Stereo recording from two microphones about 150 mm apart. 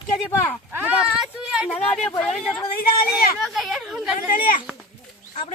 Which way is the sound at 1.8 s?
5° left (ahead or behind).